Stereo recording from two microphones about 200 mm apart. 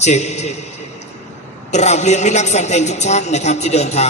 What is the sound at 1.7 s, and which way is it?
A man's voice, 35° left (ahead or behind).